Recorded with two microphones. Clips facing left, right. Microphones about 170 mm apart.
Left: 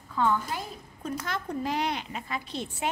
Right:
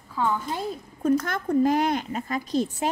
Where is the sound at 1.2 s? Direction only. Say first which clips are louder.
Right 9 dB; 50° right (ahead or behind).